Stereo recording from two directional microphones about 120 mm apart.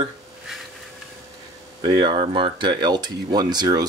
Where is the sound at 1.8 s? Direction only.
45° right (ahead or behind).